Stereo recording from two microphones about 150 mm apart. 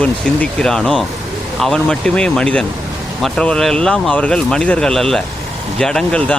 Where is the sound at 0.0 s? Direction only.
5° left (ahead or behind).